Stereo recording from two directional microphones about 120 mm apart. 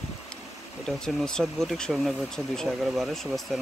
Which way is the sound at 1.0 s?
5° left (ahead or behind).